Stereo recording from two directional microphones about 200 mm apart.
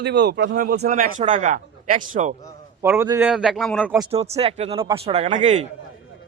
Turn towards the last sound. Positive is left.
turn(degrees=-35)  # may be behind; listen again after turning